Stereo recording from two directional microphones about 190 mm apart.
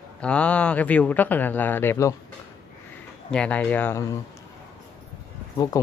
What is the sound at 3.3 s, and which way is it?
Speech, 5° left (ahead or behind).